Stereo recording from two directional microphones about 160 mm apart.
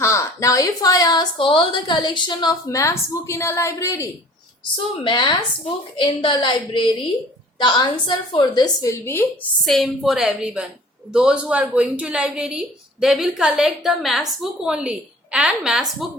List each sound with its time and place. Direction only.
0.0 s a woman's voice: 20° left (ahead or behind)
5.0 s a woman's voice: 30° left (ahead or behind)
9.6 s a woman's voice: centre (ahead or behind)